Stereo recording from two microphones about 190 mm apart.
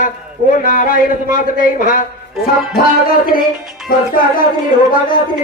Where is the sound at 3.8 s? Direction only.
50° left (ahead or behind).